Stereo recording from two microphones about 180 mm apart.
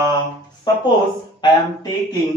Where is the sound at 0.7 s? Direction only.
25° left (ahead or behind).